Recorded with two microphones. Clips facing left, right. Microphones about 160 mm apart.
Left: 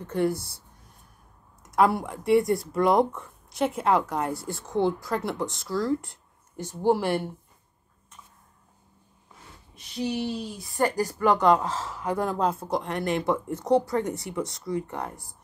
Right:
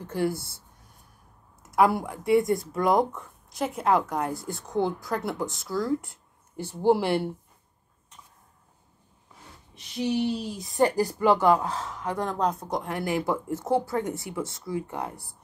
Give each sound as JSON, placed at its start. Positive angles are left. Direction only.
{"t": 0.0, "sound": "speech", "side_deg": -5}
{"t": 1.6, "sound": "speech", "side_deg": -5}
{"t": 6.7, "sound": "speech", "side_deg": -15}
{"t": 10.8, "sound": "speech", "side_deg": -10}